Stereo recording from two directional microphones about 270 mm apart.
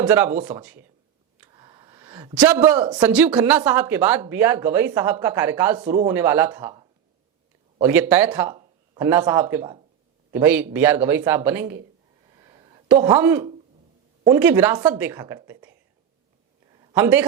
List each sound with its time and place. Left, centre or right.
0.0 s speech: centre
1.4 s a sound: centre
2.7 s speech: centre
3.0 s a woman's voice: centre
5.8 s speech: right
6.1 s speech: centre
12.4 s a sound: centre
13.0 s speech: centre
16.9 s speech: centre